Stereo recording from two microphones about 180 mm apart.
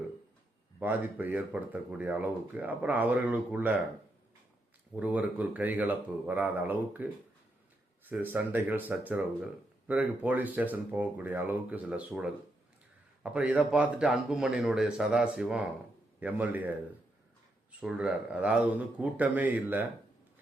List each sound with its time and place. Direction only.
0.8 s speech: 10° right (ahead or behind)
4.9 s speech: 10° right (ahead or behind)